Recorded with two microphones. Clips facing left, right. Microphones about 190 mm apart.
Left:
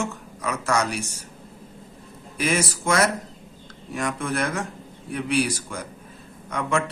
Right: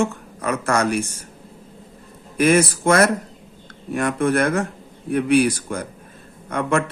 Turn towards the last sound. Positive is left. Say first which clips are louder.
# right 4 dB
turn(degrees=-55)  # may be behind; listen again after turning